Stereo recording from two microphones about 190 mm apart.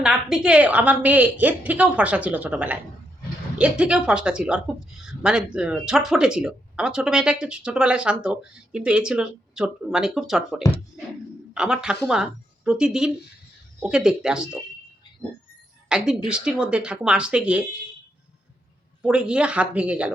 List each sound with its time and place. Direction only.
0.0 s a woman's voice: 5° right (ahead or behind)
15.9 s speech: 5° right (ahead or behind)
19.0 s speech: 5° right (ahead or behind)